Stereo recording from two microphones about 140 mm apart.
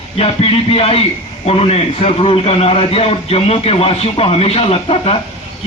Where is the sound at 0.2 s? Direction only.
45° left (ahead or behind).